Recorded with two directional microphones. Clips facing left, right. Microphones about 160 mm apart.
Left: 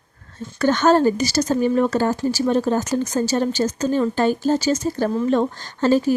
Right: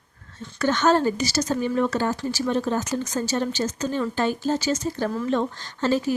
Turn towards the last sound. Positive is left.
turn(degrees=40)  # may be behind; listen again after turning